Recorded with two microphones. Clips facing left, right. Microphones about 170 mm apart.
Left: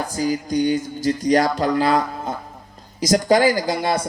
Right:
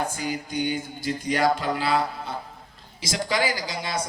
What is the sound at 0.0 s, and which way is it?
A man's voice, 40° left (ahead or behind).